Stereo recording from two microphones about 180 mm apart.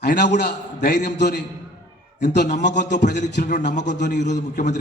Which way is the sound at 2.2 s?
50° left (ahead or behind).